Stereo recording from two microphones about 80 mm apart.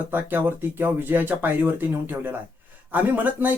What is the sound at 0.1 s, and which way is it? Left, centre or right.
Speech, right.